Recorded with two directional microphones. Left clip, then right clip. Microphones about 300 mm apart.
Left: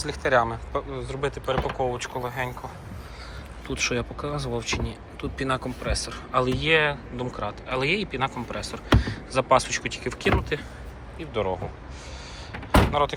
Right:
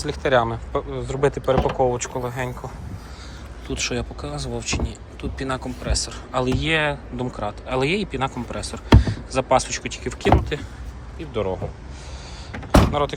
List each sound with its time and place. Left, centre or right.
0.0 s speech: centre
3.7 s speech: centre
12.9 s speech: centre